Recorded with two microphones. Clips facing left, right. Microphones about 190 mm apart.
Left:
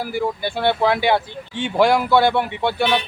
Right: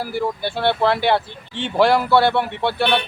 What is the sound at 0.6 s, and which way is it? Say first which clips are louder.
Speech: even; 10° left (ahead or behind).